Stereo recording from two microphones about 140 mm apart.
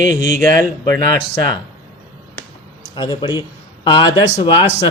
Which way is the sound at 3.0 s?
30° left (ahead or behind).